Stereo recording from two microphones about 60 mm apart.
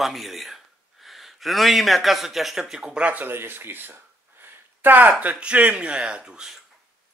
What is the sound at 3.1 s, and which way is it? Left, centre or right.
Speech, right.